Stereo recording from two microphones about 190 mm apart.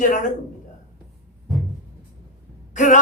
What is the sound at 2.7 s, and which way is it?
Speech, 40° left (ahead or behind).